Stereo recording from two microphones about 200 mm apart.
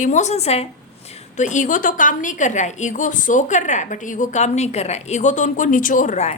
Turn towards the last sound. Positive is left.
turn(degrees=35)  # may be behind; listen again after turning